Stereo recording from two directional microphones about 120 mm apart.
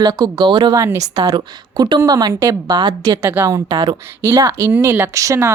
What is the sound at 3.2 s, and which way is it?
Speech, 20° right (ahead or behind).